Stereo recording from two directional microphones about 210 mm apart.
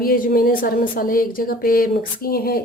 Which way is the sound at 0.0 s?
45° left (ahead or behind).